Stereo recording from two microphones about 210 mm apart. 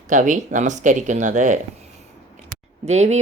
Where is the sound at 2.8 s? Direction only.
30° right (ahead or behind).